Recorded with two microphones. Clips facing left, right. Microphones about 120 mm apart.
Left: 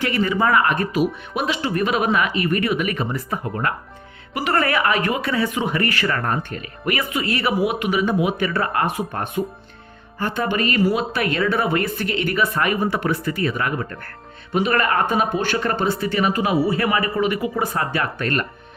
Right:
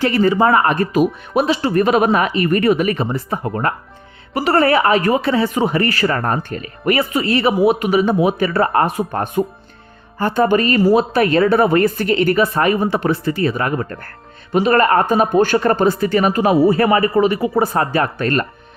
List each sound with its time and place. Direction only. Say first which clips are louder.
0.0 s speech: right 6 dB; 35° right (ahead or behind)